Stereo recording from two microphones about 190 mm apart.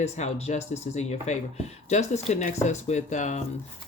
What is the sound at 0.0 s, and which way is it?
Speech, 35° left (ahead or behind).